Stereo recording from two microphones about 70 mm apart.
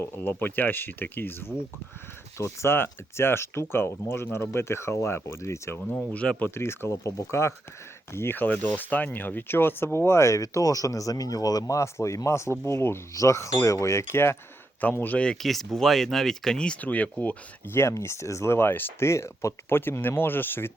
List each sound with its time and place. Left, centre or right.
0.0 s speech: left
5.9 s speech: centre
6.5 s speech: left
11.7 s speech: left
15.2 s speech: centre
16.8 s speech: left
17.7 s speech: left
19.8 s speech: left